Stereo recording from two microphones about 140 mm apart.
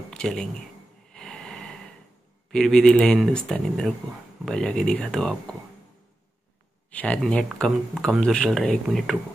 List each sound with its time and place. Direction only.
0.1 s speech: 5° left (ahead or behind)
1.1 s snort: 5° left (ahead or behind)
2.5 s speech: 5° left (ahead or behind)
6.9 s speech: 10° left (ahead or behind)